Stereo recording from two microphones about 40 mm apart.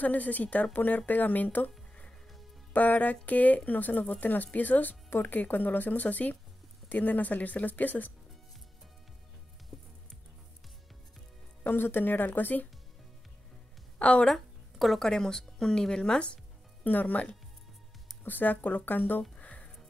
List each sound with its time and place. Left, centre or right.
0.0 s speech: left
2.7 s speech: left
11.6 s speech: left
13.9 s a woman's voice: left
14.2 s a sound: centre
15.0 s speech: centre
16.8 s speech: left
19.4 s music: left